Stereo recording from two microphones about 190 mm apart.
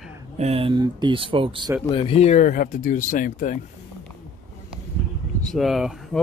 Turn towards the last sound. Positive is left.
turn(degrees=0)  # may be behind; listen again after turning